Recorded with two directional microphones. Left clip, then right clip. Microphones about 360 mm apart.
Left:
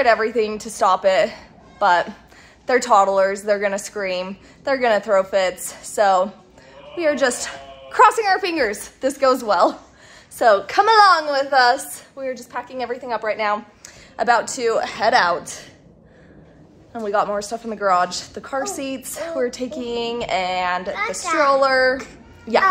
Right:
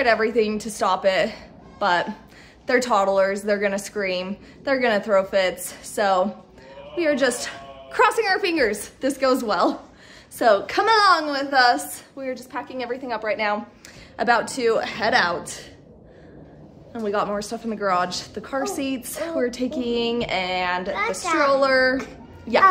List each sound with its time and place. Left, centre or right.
0.0 s a woman's voice: centre
16.9 s a woman's voice: centre